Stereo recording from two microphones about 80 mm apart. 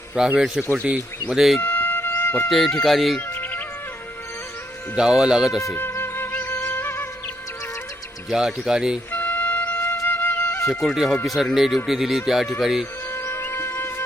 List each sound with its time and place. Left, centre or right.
0.3 s speech: centre
1.3 s speech: centre
1.6 s a sound: left
2.5 s speech: centre
3.2 s music: left
4.9 s speech: centre
5.7 s music: left
8.3 s speech: centre
9.1 s music: left
9.8 s music: left
10.1 s music: left
10.7 s speech: centre
13.1 s music: left